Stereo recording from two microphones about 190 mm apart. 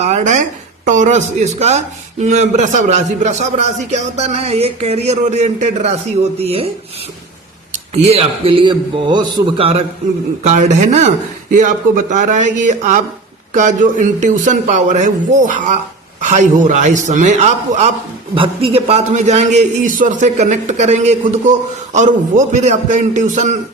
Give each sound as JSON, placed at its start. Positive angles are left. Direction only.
{"t": 0.0, "sound": "a man's voice", "side_deg": -40}
{"t": 7.7, "sound": "a man's voice", "side_deg": -35}
{"t": 12.1, "sound": "a man's voice", "side_deg": -40}